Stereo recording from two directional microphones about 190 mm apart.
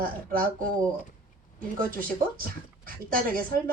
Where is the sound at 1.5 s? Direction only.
50° right (ahead or behind).